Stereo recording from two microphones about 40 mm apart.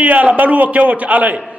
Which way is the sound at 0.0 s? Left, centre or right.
Right.